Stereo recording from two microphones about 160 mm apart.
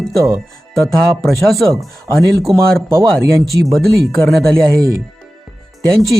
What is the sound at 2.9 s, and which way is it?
Speech, 15° right (ahead or behind).